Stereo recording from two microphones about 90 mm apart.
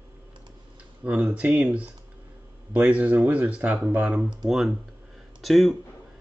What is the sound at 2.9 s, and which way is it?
Speech, 15° right (ahead or behind).